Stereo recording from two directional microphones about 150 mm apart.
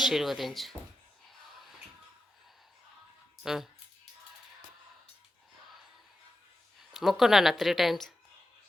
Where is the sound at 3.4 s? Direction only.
5° right (ahead or behind).